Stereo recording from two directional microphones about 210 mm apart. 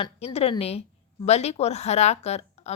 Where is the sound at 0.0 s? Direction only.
25° left (ahead or behind).